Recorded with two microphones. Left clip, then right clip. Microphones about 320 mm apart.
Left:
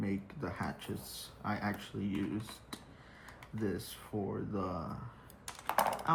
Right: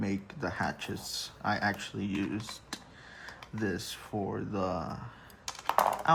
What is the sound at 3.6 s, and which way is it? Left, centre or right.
Speech, right.